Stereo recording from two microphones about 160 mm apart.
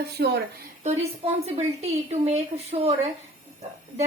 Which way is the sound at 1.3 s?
40° right (ahead or behind).